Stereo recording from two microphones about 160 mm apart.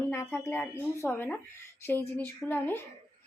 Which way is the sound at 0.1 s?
15° left (ahead or behind).